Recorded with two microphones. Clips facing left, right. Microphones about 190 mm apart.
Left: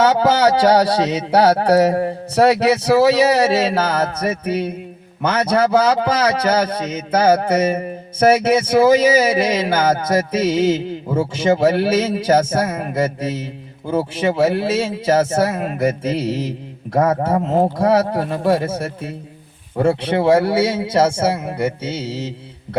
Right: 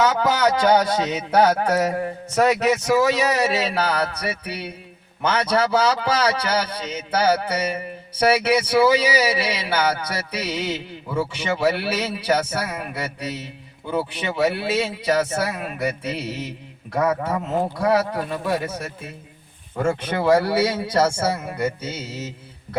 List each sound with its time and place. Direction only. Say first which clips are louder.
0.0 s speech: left 5 dB; 40° left (ahead or behind)
5.5 s a sound: left 5 dB; 50° left (ahead or behind)
13.8 s a man's voice: left 6 dB; 40° left (ahead or behind)